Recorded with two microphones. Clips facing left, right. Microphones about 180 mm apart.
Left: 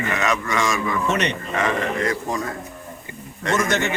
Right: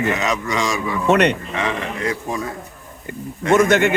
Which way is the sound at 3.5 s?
55° right (ahead or behind).